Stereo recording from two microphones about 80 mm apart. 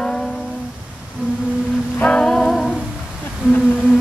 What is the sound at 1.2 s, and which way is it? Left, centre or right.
Humming, centre.